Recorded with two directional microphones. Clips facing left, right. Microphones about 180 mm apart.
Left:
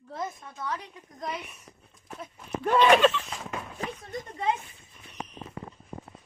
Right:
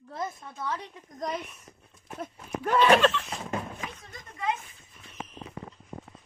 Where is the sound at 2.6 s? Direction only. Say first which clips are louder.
Left 1 dB; 5° right (ahead or behind).